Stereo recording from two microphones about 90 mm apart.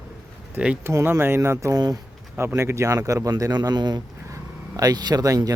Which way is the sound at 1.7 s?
45° right (ahead or behind).